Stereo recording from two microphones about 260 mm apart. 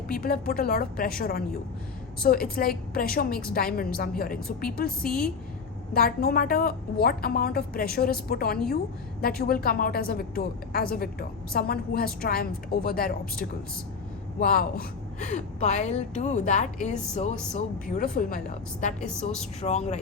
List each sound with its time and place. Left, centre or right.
0.2 s a woman's voice: left
5.0 s a woman's voice: centre
5.9 s a woman's voice: left